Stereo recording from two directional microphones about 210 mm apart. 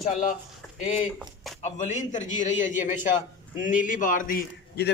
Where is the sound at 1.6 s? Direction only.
35° left (ahead or behind).